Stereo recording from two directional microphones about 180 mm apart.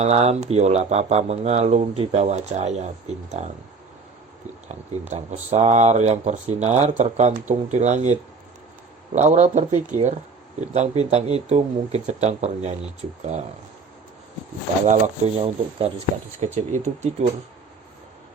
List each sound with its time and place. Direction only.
0.0 s speech: 35° right (ahead or behind)
4.7 s speech: 40° right (ahead or behind)
9.1 s speech: 40° right (ahead or behind)
14.8 s speech: 35° right (ahead or behind)